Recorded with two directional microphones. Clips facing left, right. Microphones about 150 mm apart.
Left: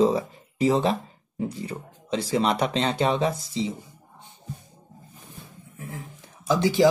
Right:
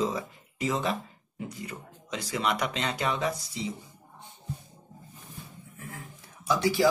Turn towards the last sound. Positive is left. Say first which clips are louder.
# left 5 dB
turn(degrees=20)  # may be behind; listen again after turning